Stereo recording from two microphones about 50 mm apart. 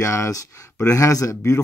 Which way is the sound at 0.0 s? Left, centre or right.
Left.